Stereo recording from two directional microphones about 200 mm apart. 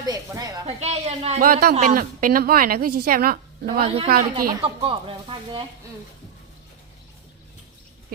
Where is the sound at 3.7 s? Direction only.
25° right (ahead or behind).